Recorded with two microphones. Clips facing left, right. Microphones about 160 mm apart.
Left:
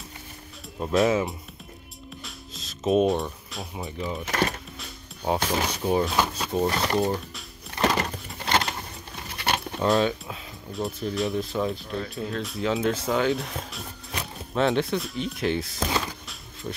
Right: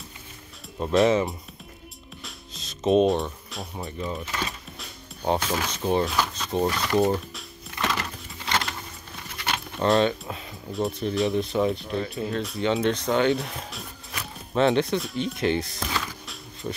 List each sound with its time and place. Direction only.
0.7 s speech: centre (ahead or behind)
2.2 s music: centre (ahead or behind)
4.3 s speech: 65° left (ahead or behind)
4.7 s music: centre (ahead or behind)
5.7 s speech: 5° left (ahead or behind)
6.7 s speech: 35° left (ahead or behind)
7.7 s a sound: 35° left (ahead or behind)
9.8 s speech: centre (ahead or behind)
15.8 s music: 25° left (ahead or behind)